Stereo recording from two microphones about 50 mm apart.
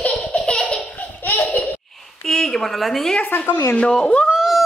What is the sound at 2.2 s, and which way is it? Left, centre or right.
Speech, centre.